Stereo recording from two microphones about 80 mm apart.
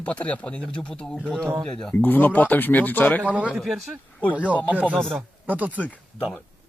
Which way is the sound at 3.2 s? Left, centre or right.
Centre.